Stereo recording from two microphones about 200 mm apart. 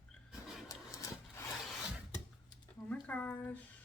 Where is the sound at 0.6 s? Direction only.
15° left (ahead or behind).